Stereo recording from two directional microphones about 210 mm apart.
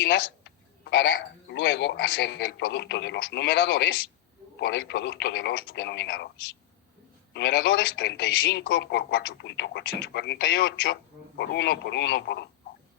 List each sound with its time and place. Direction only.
0.1 s speech: 50° left (ahead or behind)
7.3 s speech: 50° left (ahead or behind)
8.3 s speech: 60° left (ahead or behind)